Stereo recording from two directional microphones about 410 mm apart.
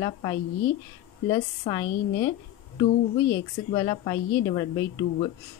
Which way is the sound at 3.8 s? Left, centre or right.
Centre.